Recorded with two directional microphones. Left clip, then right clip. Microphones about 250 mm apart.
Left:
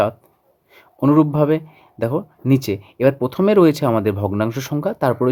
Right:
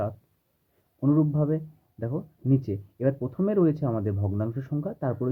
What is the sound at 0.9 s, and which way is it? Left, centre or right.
Speech, left.